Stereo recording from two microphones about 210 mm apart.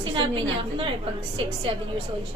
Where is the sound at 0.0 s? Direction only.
25° right (ahead or behind).